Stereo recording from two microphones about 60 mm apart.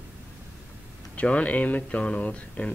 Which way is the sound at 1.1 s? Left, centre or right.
Left.